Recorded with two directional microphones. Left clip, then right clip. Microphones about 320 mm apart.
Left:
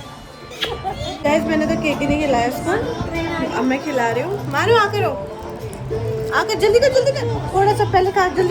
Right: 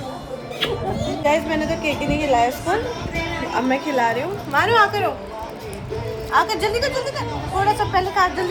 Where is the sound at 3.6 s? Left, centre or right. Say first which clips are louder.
Right 1 dB; centre.